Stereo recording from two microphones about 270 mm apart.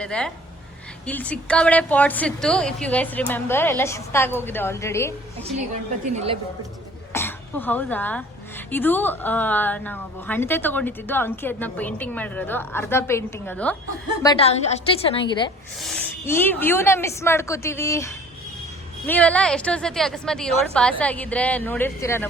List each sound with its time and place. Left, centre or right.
0.0 s a woman's voice: centre
7.1 s speech: centre
14.2 s a woman's voice: centre
15.8 s a woman's voice: centre